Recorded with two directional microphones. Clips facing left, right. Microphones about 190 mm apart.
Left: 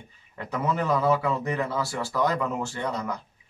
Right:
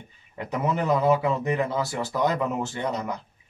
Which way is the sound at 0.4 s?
20° right (ahead or behind).